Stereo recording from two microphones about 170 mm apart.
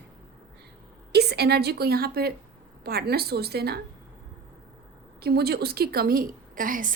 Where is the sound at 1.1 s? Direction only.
75° right (ahead or behind).